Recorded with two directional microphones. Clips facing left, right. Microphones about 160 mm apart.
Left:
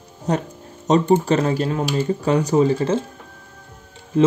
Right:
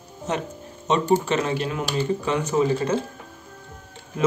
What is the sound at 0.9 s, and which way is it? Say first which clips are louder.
Speech: left 4 dB; 40° left (ahead or behind).